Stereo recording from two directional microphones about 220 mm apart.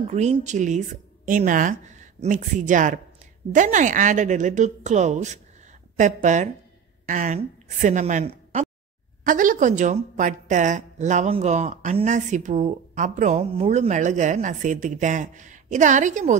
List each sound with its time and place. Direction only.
0.1 s a woman's voice: 30° right (ahead or behind)